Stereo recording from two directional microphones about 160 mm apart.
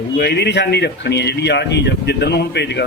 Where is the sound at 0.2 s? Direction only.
90° left.